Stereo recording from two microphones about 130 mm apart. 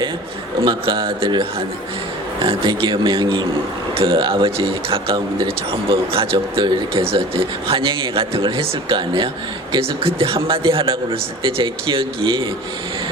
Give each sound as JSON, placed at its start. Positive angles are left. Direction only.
{"t": 0.6, "sound": "speech", "side_deg": -40}